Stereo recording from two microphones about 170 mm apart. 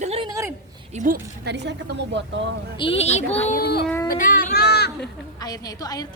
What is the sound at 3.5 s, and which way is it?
Child singing, 65° left (ahead or behind).